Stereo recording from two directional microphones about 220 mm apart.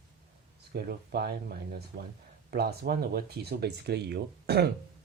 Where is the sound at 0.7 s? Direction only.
45° right (ahead or behind).